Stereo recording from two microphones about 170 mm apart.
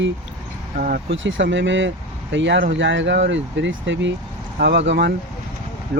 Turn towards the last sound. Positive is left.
turn(degrees=-90)